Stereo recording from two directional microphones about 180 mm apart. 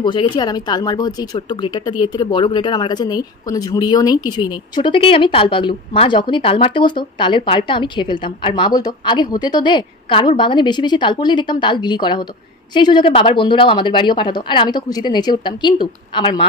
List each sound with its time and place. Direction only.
0.0 s speech: 25° left (ahead or behind)